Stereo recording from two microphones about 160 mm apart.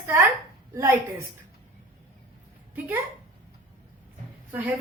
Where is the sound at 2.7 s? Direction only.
15° right (ahead or behind).